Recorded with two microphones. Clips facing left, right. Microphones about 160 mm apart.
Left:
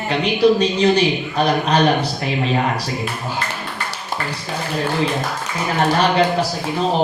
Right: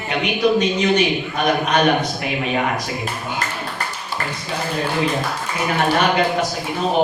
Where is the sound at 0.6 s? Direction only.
30° left (ahead or behind).